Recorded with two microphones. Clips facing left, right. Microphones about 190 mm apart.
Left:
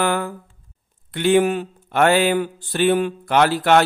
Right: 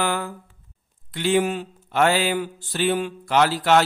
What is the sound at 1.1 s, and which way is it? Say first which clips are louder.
Speech: left 5 dB; 55° left (ahead or behind).